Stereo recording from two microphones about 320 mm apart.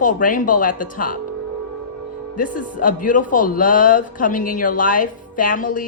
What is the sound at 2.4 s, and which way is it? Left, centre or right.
Speech, left.